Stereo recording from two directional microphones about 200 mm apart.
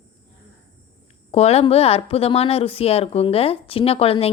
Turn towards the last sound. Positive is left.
turn(degrees=30)  # may be behind; listen again after turning